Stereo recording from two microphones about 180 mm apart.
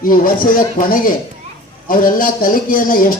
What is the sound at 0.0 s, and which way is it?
Speech, 50° left (ahead or behind).